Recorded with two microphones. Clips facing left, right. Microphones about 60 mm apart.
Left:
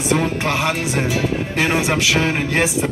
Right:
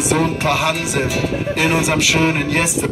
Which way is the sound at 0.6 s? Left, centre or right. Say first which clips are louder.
Right 1 dB; left.